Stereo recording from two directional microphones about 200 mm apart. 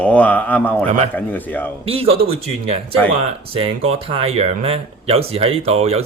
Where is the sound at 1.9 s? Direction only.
30° right (ahead or behind).